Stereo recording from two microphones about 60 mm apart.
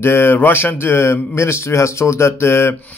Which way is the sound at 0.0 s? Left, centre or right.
Left.